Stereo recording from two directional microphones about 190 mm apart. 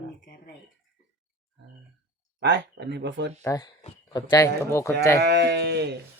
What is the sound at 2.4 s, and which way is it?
Speech, 65° right (ahead or behind).